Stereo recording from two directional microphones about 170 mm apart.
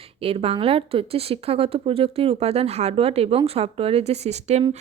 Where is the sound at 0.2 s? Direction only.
35° right (ahead or behind).